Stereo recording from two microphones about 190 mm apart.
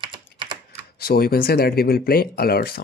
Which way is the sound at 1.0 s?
55° left (ahead or behind).